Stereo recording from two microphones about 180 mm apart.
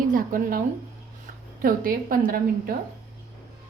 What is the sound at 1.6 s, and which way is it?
A woman's voice, 50° right (ahead or behind).